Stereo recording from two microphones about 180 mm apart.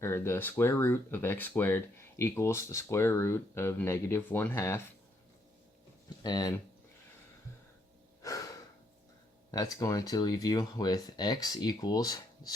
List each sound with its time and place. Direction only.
0.0 s speech: 15° left (ahead or behind)
6.2 s speech: 20° left (ahead or behind)
8.2 s breathing: 20° left (ahead or behind)
9.5 s speech: 20° left (ahead or behind)